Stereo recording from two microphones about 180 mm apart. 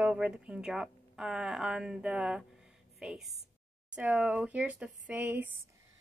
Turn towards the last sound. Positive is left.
turn(degrees=-10)  # may be behind; listen again after turning